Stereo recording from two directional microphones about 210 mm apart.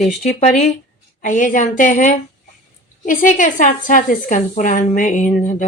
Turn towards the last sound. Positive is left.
turn(degrees=40)  # may be behind; listen again after turning